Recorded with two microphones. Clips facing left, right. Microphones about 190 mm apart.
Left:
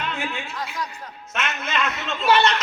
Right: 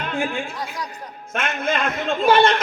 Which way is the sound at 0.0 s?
50° right (ahead or behind).